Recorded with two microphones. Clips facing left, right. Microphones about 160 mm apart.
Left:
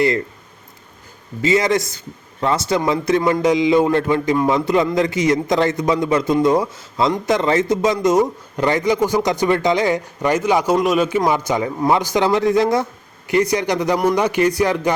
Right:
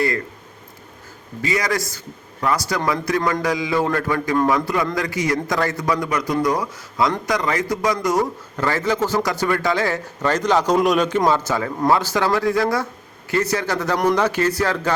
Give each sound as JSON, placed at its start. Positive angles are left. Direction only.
{"t": 1.4, "sound": "a man's voice", "side_deg": 25}